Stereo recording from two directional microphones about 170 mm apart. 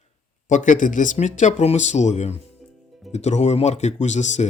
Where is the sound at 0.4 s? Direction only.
45° left (ahead or behind).